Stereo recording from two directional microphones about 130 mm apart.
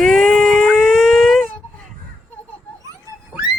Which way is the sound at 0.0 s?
Centre (ahead or behind).